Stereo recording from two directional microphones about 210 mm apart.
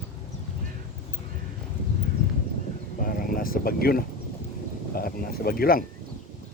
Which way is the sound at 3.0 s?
40° left (ahead or behind).